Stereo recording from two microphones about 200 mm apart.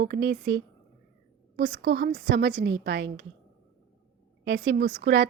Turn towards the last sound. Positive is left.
turn(degrees=-65)  # may be behind; listen again after turning